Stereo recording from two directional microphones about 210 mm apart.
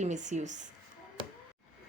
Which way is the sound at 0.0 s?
35° right (ahead or behind).